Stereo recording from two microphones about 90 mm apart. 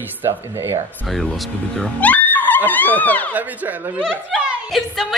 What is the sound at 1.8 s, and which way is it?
Music, 15° left (ahead or behind).